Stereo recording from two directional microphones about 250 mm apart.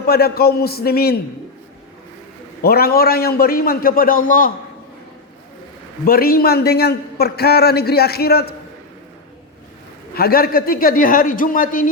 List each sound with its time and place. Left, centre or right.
0.0 s a man's voice: left
2.6 s a man's voice: left
6.1 s a man's voice: left
10.2 s a man's voice: left